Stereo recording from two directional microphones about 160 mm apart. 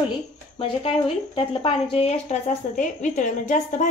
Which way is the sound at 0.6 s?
35° left (ahead or behind).